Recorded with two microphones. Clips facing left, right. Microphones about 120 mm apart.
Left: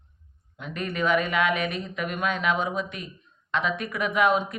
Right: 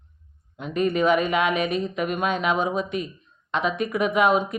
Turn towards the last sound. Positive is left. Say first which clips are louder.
# right 3 dB
turn(degrees=-20)  # may be behind; listen again after turning